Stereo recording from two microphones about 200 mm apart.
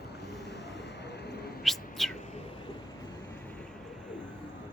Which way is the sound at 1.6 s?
Centre (ahead or behind).